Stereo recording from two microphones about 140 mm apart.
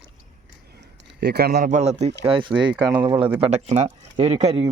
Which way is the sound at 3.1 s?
40° right (ahead or behind).